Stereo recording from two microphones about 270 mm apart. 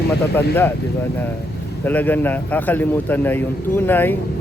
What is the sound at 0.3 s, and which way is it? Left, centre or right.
Speech, centre.